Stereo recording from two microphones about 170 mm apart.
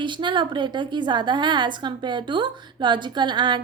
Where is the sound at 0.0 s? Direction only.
30° right (ahead or behind).